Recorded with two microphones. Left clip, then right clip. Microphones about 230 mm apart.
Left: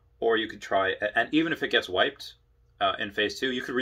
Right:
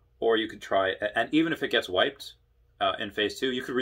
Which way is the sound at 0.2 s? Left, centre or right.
Centre.